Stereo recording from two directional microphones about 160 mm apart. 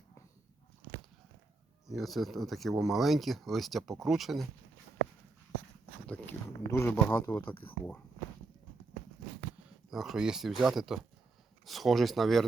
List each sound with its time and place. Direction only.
1.9 s speech: centre (ahead or behind)
6.1 s a sound: 10° left (ahead or behind)
9.9 s speech: centre (ahead or behind)